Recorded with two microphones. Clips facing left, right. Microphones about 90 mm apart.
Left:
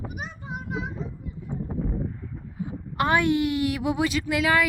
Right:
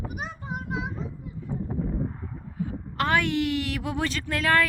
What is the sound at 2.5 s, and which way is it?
A woman's voice, 20° left (ahead or behind).